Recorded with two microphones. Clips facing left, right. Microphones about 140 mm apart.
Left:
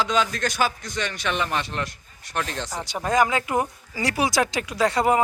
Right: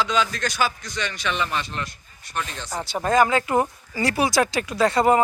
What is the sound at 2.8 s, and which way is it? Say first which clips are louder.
Speech: right 2 dB; 15° left (ahead or behind).